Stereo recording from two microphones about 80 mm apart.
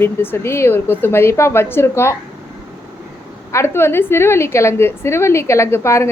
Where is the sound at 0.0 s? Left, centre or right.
Left.